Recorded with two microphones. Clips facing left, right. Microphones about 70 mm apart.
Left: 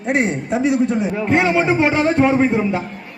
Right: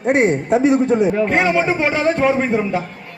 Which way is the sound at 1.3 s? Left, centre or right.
Centre.